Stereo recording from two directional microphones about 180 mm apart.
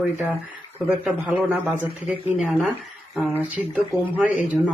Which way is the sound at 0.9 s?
Centre (ahead or behind).